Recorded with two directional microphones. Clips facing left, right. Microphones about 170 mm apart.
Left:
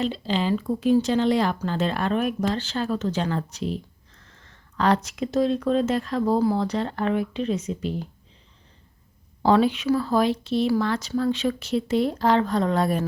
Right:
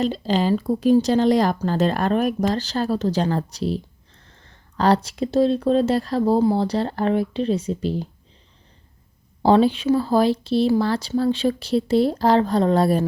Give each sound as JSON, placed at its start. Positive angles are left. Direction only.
{"t": 0.0, "sound": "speech", "side_deg": -40}
{"t": 4.2, "sound": "a sound", "side_deg": -30}
{"t": 5.0, "sound": "speech", "side_deg": -35}
{"t": 9.4, "sound": "speech", "side_deg": -30}